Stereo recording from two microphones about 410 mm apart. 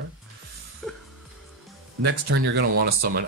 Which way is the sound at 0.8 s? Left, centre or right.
Centre.